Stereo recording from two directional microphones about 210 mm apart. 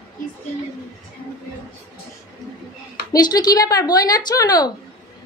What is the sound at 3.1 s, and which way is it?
A woman's voice, 20° left (ahead or behind).